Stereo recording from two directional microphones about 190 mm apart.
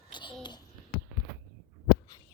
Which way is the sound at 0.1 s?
25° left (ahead or behind).